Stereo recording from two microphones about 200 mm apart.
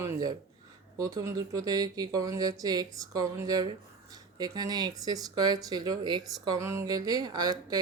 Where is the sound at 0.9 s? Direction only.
20° right (ahead or behind).